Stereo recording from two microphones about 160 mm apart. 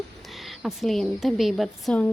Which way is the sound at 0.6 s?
Centre (ahead or behind).